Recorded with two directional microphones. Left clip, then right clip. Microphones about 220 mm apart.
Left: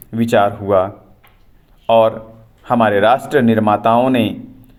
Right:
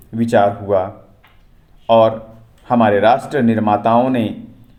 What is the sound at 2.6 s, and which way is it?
Speech, 25° left (ahead or behind).